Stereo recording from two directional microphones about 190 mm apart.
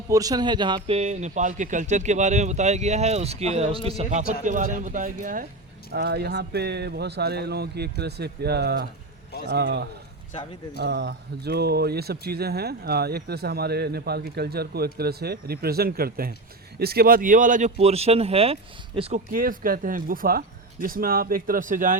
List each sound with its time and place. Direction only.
0.1 s speech: 20° right (ahead or behind)
0.9 s speech: 35° right (ahead or behind)
5.9 s speech: 55° right (ahead or behind)
10.8 s speech: 60° right (ahead or behind); by 19.2 s 30° right (ahead or behind)
19.3 s speech: 45° right (ahead or behind)